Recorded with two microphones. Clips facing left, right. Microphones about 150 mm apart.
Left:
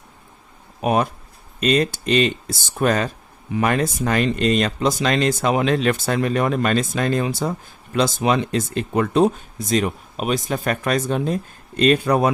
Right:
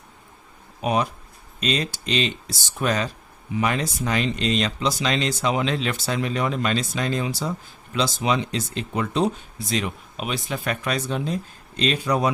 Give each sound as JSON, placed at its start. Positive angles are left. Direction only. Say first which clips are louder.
{"t": 0.8, "sound": "speech", "louder": "left 4 dB", "side_deg": 50}